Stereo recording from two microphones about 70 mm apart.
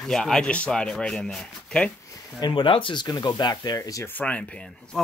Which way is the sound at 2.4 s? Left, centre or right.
Left.